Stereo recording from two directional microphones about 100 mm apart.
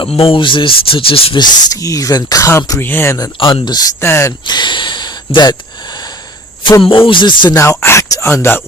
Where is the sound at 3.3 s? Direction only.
60° left (ahead or behind); by 3.9 s 45° left (ahead or behind).